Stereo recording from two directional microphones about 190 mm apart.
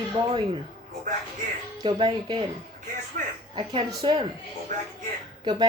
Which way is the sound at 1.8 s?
25° right (ahead or behind).